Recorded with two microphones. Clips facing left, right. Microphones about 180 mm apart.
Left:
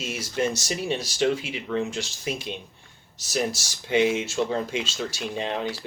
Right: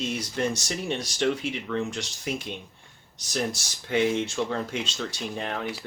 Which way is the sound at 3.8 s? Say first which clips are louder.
Left 2 dB; 5° left (ahead or behind).